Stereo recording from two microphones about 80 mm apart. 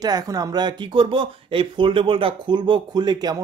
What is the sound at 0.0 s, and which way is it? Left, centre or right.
Speech, right.